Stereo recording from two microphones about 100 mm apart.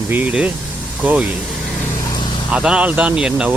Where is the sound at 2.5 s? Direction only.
10° right (ahead or behind).